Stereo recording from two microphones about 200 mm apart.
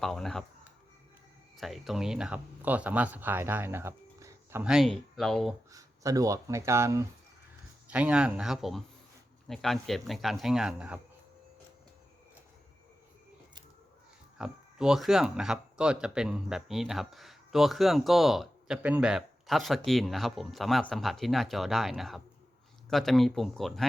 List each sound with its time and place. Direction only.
0.0 s speech: centre (ahead or behind)
1.5 s speech: centre (ahead or behind)
4.6 s speech: centre (ahead or behind)
5.7 s speech: 15° right (ahead or behind)
14.3 s speech: 5° right (ahead or behind)